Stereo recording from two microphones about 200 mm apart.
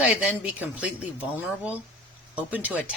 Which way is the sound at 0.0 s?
5° right (ahead or behind).